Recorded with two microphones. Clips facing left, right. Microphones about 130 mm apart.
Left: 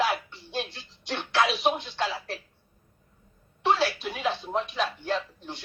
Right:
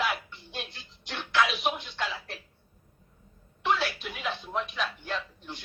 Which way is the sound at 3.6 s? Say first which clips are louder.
Left 4 dB; 35° left (ahead or behind).